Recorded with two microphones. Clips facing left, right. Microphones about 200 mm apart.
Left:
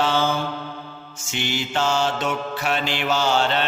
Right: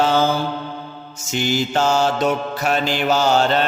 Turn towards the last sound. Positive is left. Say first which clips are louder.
# right 4 dB
turn(degrees=-40)  # may be behind; listen again after turning